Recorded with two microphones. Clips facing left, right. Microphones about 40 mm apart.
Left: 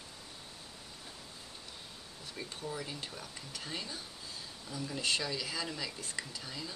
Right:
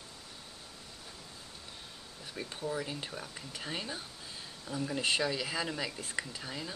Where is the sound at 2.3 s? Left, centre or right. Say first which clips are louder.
Right 4 dB; centre.